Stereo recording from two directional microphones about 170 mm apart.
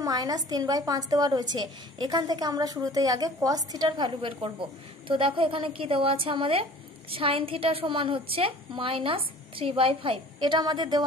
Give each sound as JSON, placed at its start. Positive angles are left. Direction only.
{"t": 0.0, "sound": "a woman's voice", "side_deg": -20}